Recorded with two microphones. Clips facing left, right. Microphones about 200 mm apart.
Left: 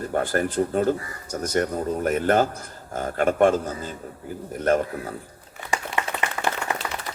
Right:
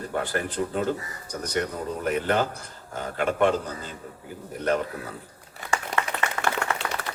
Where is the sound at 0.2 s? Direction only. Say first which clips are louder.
Left 5 dB; 45° left (ahead or behind).